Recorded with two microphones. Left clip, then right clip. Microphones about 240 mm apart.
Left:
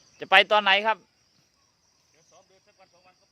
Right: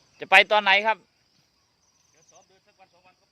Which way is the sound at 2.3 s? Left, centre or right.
Centre.